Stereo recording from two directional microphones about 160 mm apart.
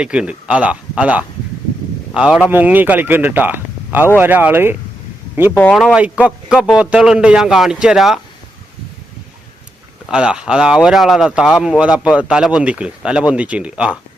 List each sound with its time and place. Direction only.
0.0 s speech: 5° right (ahead or behind)
10.1 s speech: 5° right (ahead or behind)